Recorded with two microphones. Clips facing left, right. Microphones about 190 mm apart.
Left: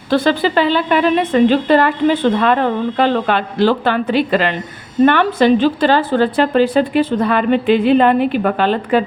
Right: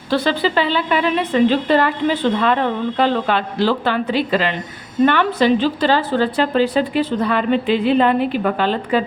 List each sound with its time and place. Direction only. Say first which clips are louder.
0.1 s a woman's voice: left 3 dB; 50° left (ahead or behind)